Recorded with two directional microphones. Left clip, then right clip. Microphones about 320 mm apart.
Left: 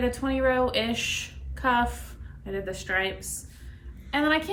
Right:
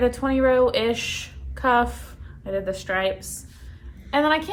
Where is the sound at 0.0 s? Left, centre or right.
Centre.